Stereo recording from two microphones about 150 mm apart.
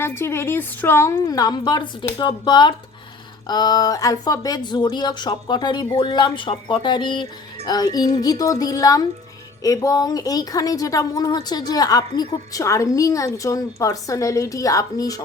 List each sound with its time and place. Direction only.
0.0 s a woman's voice: 15° left (ahead or behind)